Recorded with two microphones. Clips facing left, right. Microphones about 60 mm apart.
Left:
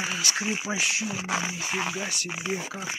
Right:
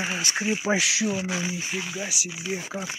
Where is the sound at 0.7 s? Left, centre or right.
Right.